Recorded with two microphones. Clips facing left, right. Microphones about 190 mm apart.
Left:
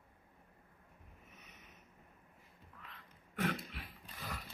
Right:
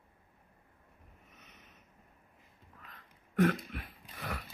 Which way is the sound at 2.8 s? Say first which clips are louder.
Even; 45° right (ahead or behind).